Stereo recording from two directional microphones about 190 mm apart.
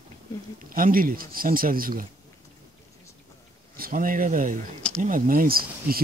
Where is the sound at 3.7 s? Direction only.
50° right (ahead or behind).